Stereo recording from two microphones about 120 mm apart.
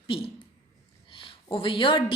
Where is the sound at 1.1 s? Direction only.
45° left (ahead or behind).